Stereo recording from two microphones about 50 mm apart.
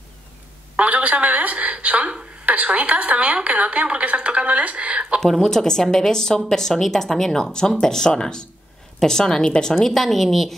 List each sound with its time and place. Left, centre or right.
0.7 s a woman's voice: right
5.2 s speech: centre
9.8 s speech: centre